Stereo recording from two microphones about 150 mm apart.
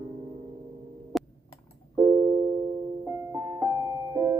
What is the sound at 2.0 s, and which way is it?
Music, 25° right (ahead or behind).